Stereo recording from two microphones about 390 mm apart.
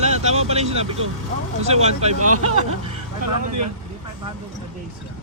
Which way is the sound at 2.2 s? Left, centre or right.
Right.